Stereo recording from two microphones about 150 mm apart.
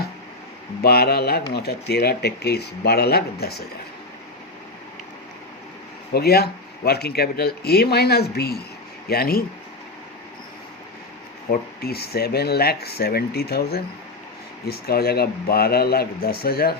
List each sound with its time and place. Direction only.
0.8 s speech: 90° left
6.1 s speech: 90° left
11.8 s speech: 90° left